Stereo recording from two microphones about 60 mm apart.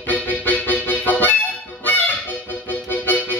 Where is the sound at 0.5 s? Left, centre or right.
Left.